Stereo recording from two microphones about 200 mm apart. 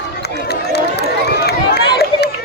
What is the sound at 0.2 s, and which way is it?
Run, 55° left (ahead or behind).